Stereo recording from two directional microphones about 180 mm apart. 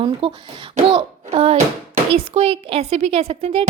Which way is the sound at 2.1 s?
30° right (ahead or behind).